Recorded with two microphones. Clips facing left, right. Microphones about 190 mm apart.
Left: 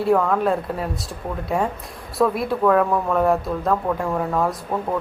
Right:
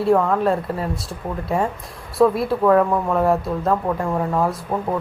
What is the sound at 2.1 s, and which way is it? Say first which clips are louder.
Speech: right 3 dB; centre (ahead or behind).